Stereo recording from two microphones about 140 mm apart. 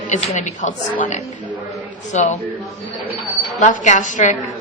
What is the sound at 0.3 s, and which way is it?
A woman's voice, 60° left (ahead or behind).